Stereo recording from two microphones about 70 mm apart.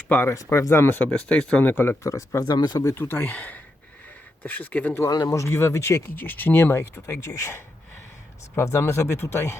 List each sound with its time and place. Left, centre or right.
0.1 s speech: left
0.3 s speech: left
0.7 s speech: left
1.3 s speech: centre
1.6 s speech: left
2.0 s speech: left
2.4 s speech: left
2.8 s speech: left
5.2 s speech: left
6.1 s speech: left